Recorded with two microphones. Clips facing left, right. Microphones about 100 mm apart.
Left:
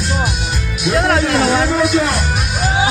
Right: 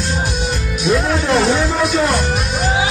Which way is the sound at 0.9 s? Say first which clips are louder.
Left 5 dB; 75° left (ahead or behind).